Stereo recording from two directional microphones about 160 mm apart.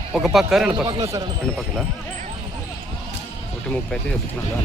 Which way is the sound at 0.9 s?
25° right (ahead or behind).